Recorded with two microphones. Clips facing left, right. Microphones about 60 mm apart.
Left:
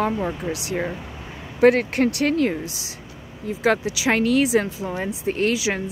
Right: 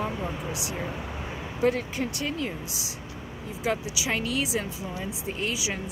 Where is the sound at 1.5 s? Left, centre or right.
Left.